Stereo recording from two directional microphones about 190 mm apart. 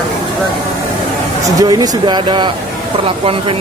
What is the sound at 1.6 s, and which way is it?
Speech, 20° right (ahead or behind).